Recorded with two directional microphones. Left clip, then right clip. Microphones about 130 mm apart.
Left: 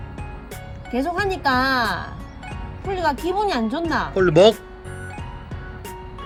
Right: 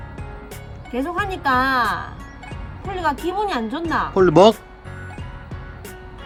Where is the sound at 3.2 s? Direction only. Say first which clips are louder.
Left 1 dB; 25° left (ahead or behind).